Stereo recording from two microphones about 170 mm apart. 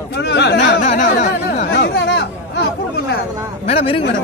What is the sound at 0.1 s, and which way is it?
Chatter, 90° left.